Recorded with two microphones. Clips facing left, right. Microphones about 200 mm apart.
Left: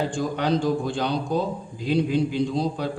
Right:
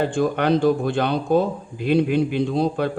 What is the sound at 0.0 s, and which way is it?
A man's voice, 60° right (ahead or behind).